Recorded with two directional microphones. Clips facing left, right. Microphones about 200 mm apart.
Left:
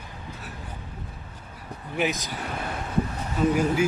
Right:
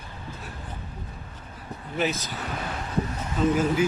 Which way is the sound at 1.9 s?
15° left (ahead or behind).